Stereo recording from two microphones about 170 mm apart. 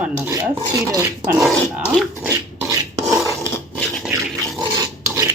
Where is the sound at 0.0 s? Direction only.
15° right (ahead or behind).